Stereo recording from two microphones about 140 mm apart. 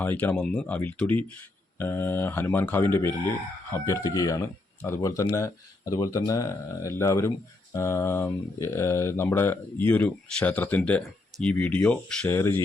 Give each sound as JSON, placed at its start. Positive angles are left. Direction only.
{"t": 0.0, "sound": "speech", "side_deg": 15}